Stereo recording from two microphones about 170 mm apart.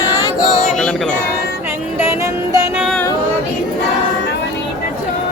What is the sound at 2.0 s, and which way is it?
Music, 15° right (ahead or behind).